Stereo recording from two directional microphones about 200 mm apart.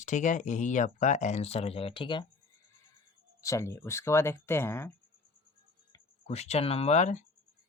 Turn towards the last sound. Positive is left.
turn(degrees=35)  # may be behind; listen again after turning